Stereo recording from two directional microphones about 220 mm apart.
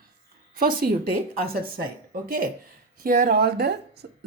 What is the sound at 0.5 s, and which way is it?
A woman's voice, 40° right (ahead or behind).